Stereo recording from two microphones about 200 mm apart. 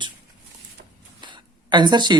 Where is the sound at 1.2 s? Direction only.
20° right (ahead or behind).